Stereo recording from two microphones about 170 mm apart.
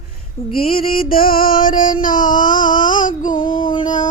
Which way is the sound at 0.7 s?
60° left (ahead or behind).